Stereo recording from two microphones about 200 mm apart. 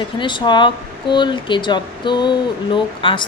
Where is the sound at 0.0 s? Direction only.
25° left (ahead or behind).